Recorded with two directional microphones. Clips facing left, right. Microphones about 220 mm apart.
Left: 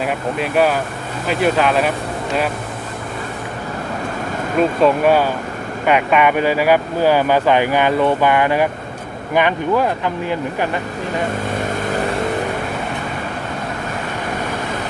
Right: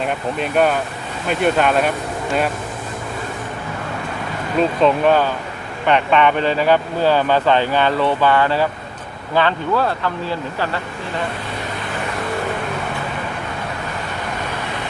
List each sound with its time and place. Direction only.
0.0 s speech: 5° left (ahead or behind)
4.5 s speech: 10° left (ahead or behind)